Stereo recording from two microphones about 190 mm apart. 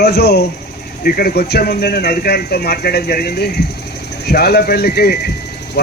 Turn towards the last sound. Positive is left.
turn(degrees=60)  # may be behind; listen again after turning